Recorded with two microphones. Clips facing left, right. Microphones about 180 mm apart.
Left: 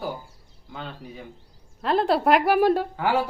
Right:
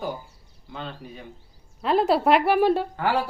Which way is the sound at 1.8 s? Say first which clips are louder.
Right 1 dB; 5° right (ahead or behind).